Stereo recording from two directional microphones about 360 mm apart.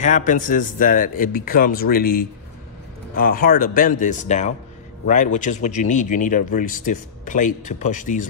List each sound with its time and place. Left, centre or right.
0.0 s speech: left